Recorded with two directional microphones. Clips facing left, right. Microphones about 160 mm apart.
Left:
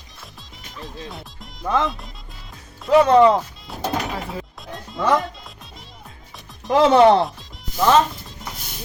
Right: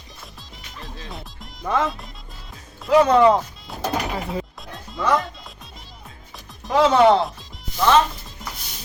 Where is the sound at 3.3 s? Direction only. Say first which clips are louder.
Right 1 dB; centre (ahead or behind).